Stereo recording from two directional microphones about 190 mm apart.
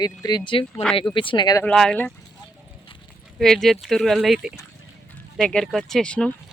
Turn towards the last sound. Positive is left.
turn(degrees=5)  # may be behind; listen again after turning